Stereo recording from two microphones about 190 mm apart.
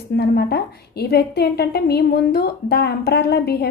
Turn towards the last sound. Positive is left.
turn(degrees=60)  # may be behind; listen again after turning